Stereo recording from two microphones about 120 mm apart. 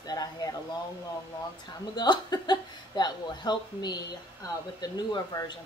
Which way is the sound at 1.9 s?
35° left (ahead or behind).